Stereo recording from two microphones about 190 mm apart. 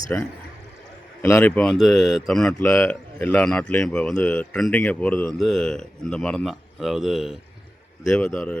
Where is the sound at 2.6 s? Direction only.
15° left (ahead or behind).